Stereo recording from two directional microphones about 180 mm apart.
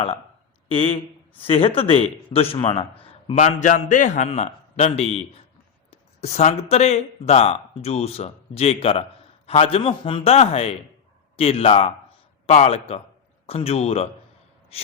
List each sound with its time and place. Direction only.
0.7 s speech: 30° left (ahead or behind)